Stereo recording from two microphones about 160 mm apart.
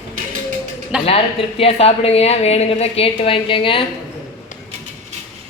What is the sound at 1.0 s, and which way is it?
A woman's voice, 40° left (ahead or behind).